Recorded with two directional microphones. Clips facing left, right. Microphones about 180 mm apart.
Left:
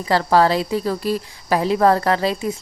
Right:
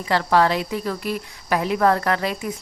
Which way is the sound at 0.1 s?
35° left (ahead or behind).